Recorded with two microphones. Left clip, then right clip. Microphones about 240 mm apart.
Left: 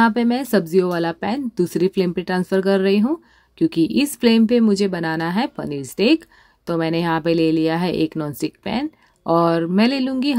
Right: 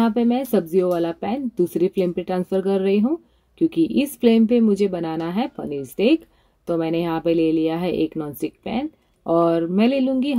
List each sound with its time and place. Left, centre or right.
0.0 s speech: left